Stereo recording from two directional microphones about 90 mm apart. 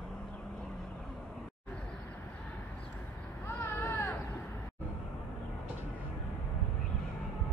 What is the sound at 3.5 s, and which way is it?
Baby cry, 30° left (ahead or behind).